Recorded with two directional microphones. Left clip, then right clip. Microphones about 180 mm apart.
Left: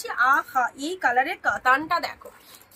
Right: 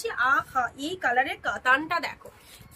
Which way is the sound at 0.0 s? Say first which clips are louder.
Left 3 dB; 10° right (ahead or behind).